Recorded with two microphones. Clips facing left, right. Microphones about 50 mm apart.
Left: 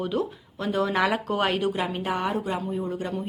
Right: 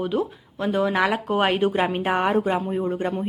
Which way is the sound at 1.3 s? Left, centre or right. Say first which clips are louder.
Right 4 dB; right.